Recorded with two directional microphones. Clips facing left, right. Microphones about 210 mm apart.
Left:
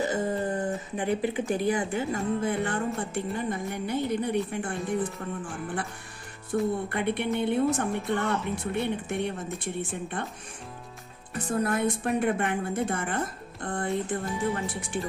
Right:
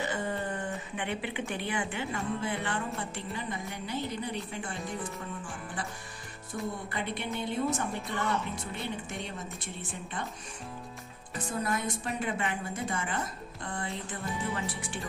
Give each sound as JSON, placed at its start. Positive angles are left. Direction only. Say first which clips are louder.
{"t": 0.0, "sound": "a woman's voice", "louder": "left 6 dB", "side_deg": 40}
{"t": 6.5, "sound": "a woman's voice", "louder": "left 9 dB", "side_deg": 60}
{"t": 11.6, "sound": "a woman's voice", "louder": "left 7 dB", "side_deg": 60}